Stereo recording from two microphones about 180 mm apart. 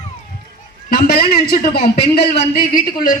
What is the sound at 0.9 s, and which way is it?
A man's voice, 55° left (ahead or behind).